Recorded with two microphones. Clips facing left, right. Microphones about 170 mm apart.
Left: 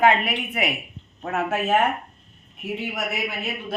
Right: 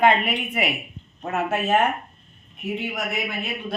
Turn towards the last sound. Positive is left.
turn(degrees=5)  # may be behind; listen again after turning